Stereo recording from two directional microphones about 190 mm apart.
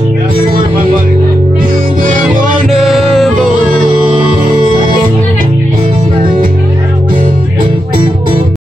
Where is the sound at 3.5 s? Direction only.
45° right (ahead or behind).